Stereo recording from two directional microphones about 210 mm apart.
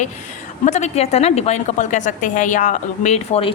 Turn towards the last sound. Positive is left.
turn(degrees=30)  # may be behind; listen again after turning